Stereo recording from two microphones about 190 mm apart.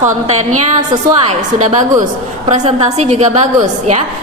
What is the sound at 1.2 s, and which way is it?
A woman's voice, 40° right (ahead or behind).